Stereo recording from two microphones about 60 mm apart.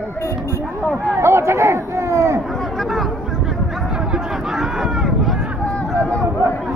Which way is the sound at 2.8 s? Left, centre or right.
Centre.